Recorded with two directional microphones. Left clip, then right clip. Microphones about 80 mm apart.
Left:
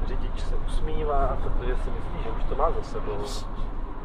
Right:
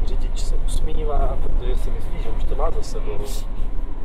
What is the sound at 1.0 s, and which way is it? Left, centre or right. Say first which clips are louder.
Vehicle: left 1 dB; left.